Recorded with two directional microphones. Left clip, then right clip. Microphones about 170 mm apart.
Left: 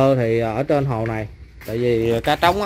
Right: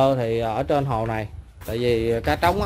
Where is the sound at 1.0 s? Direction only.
20° right (ahead or behind).